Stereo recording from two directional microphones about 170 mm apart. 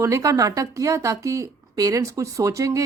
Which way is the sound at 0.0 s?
20° right (ahead or behind).